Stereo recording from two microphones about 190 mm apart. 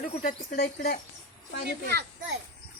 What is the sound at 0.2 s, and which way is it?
Speech, 50° left (ahead or behind).